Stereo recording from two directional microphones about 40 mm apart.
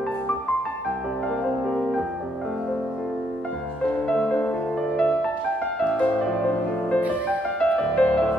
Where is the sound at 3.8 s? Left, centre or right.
Left.